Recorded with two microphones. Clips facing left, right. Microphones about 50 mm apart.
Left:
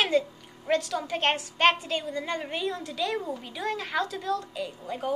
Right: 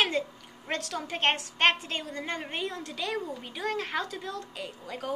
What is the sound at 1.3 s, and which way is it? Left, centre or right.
Speech, right.